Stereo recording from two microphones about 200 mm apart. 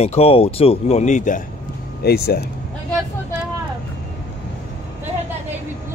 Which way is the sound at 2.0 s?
50° left (ahead or behind).